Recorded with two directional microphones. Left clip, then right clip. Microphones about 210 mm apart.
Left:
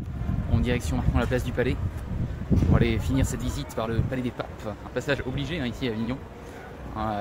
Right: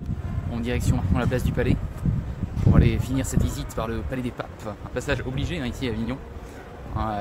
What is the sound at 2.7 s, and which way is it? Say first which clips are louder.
Speech: right 2 dB; centre (ahead or behind).